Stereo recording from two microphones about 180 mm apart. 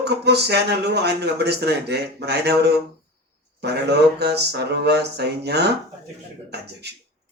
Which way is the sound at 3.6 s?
65° right (ahead or behind).